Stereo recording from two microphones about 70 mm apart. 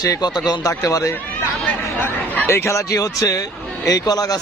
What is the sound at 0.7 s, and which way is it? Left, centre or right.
Speech, left.